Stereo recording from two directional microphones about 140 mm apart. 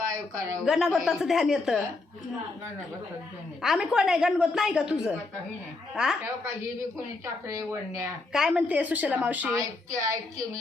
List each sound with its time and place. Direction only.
0.6 s a woman's voice: centre (ahead or behind)
3.6 s a woman's voice: 5° right (ahead or behind)
7.4 s a woman's voice: 20° right (ahead or behind)
8.3 s speech: 5° right (ahead or behind)
9.6 s a woman's voice: 25° right (ahead or behind)